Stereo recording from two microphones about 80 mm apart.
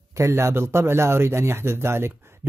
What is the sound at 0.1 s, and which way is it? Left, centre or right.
Speech, right.